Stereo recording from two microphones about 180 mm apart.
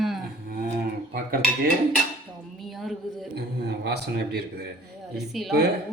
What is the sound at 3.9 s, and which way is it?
Speech, 65° right (ahead or behind).